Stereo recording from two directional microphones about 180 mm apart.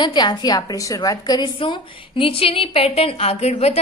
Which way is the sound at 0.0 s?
25° left (ahead or behind).